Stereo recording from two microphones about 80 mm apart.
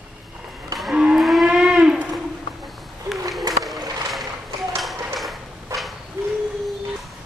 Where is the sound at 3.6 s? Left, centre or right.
Centre.